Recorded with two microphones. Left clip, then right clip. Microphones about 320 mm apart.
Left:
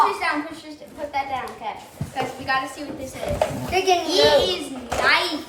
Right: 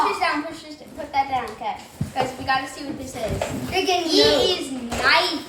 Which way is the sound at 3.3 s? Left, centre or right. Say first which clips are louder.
Left 4 dB; centre.